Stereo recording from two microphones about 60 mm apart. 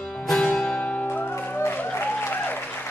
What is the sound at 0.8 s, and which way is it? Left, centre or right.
Music, left.